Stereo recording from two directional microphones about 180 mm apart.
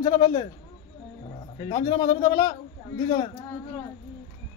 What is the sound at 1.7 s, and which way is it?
Speech, 20° left (ahead or behind).